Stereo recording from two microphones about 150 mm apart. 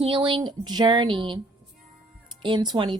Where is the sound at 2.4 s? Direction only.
30° right (ahead or behind).